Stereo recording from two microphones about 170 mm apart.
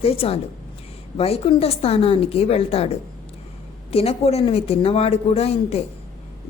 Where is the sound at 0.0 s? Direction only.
35° left (ahead or behind).